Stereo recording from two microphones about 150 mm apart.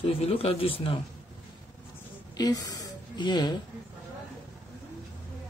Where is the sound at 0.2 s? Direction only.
40° left (ahead or behind).